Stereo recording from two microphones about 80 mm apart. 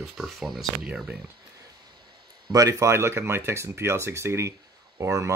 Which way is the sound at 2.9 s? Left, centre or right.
Right.